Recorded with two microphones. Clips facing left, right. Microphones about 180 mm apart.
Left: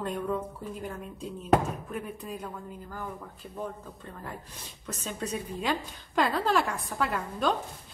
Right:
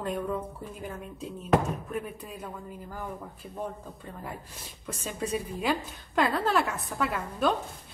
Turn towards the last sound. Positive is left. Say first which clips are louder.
# right 1 dB
turn(degrees=-5)  # may be behind; listen again after turning